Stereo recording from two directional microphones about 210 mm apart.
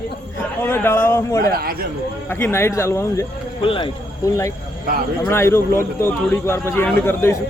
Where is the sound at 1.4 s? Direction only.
45° right (ahead or behind).